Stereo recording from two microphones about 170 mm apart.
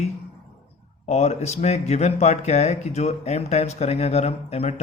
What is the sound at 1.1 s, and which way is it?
Speech, 40° left (ahead or behind).